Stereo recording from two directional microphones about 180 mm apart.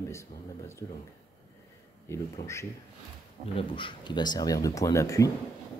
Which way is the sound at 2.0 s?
15° left (ahead or behind).